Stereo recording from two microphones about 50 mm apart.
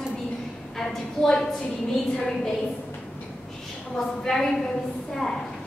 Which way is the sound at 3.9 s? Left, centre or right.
Centre.